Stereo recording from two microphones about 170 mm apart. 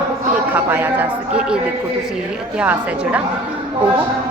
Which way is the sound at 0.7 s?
10° right (ahead or behind).